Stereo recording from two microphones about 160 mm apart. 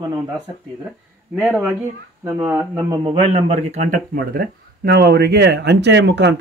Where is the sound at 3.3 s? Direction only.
45° right (ahead or behind); by 6.3 s 90° right.